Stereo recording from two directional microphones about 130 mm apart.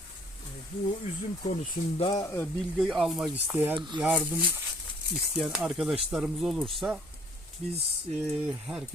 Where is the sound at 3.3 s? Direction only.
15° right (ahead or behind).